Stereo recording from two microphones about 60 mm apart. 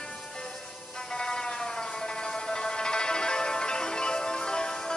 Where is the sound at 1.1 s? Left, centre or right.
Centre.